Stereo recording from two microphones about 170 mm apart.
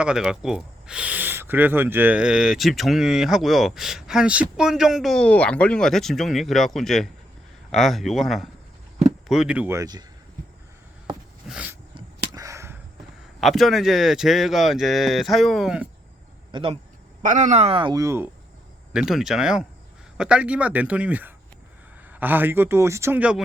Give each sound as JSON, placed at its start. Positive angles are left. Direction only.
{"t": 0.0, "sound": "speech", "side_deg": -5}
{"t": 9.7, "sound": "speech", "side_deg": -20}
{"t": 11.4, "sound": "a sound", "side_deg": -5}
{"t": 11.9, "sound": "a sound", "side_deg": -20}
{"t": 13.4, "sound": "speech", "side_deg": 0}
{"t": 16.5, "sound": "speech", "side_deg": -30}
{"t": 17.2, "sound": "speech", "side_deg": -45}
{"t": 18.9, "sound": "a man's voice", "side_deg": -5}